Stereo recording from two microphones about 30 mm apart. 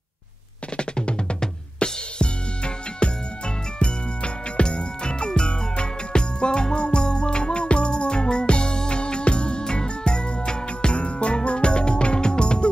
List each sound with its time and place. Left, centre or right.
0.7 s music: left